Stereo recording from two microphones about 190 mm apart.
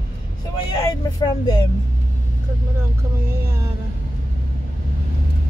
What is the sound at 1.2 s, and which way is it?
Speech, 20° left (ahead or behind).